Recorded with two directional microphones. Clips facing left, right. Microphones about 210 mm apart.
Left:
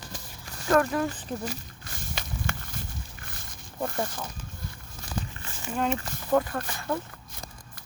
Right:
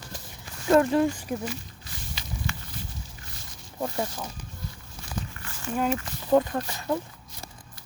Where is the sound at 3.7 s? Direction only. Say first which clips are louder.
Right 1 dB; 10° right (ahead or behind).